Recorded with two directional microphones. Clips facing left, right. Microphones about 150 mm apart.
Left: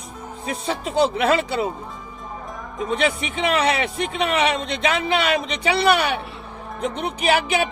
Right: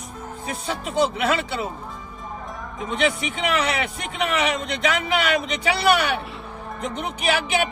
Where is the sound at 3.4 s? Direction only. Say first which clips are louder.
Left 3 dB; 30° left (ahead or behind).